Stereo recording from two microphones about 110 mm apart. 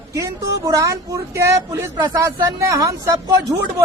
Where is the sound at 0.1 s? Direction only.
30° right (ahead or behind).